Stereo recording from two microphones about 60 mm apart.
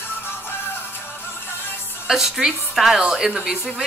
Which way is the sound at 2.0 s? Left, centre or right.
Centre.